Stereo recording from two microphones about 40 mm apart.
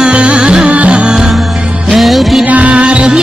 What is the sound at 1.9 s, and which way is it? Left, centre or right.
Music, centre.